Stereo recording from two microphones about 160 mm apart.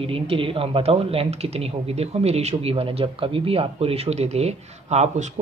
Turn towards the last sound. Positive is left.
turn(degrees=-45)  # may be behind; listen again after turning